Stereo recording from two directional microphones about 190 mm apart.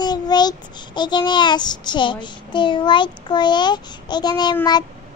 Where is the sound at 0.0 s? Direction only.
20° left (ahead or behind).